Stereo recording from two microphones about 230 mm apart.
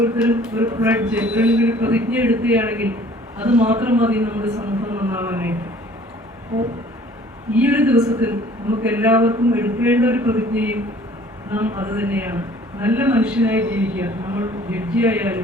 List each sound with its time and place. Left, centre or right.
0.0 s a man's voice: centre
7.5 s a man's voice: centre